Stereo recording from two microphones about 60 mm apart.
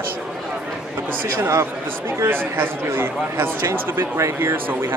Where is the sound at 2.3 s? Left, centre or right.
Right.